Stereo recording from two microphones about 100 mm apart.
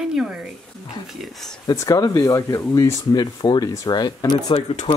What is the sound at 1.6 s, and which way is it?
Speech, 35° left (ahead or behind).